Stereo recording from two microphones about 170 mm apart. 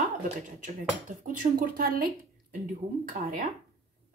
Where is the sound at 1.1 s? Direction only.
50° right (ahead or behind).